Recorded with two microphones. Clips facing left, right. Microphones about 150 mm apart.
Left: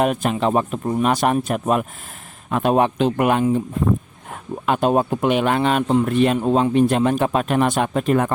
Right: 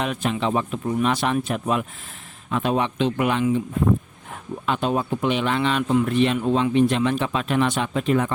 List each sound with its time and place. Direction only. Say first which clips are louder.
0.0 s speech: left 5 dB; 50° left (ahead or behind)
4.6 s speech: left 5 dB; 50° left (ahead or behind)